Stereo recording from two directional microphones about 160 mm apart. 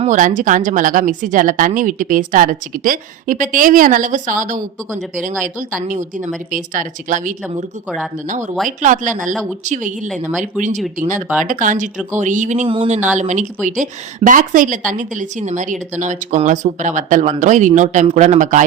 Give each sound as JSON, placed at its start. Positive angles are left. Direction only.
{"t": 0.0, "sound": "a woman's voice", "side_deg": -55}
{"t": 7.9, "sound": "speech", "side_deg": 5}
{"t": 8.3, "sound": "a woman's voice", "side_deg": -50}
{"t": 12.6, "sound": "speech", "side_deg": -35}